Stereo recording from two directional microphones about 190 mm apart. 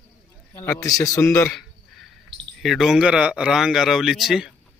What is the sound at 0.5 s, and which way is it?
Speech, 10° left (ahead or behind).